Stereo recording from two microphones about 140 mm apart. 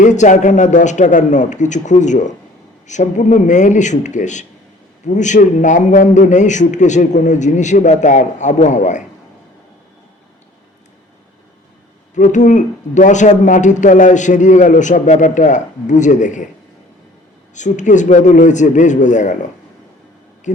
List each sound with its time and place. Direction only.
0.0 s speech: 60° left (ahead or behind)
12.1 s speech: 60° left (ahead or behind)
17.5 s speech: 60° left (ahead or behind)